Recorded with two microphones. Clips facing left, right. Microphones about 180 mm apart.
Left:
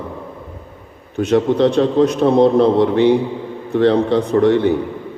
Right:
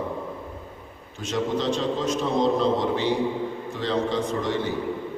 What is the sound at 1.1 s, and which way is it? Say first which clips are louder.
A man's voice: left 11 dB; 60° left (ahead or behind).